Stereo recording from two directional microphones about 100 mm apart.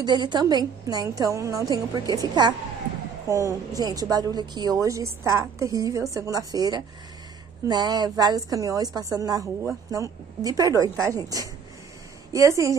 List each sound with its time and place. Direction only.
0.0 s a woman's voice: 50° right (ahead or behind)
3.3 s a woman's voice: 30° right (ahead or behind)
4.8 s a woman's voice: 30° right (ahead or behind)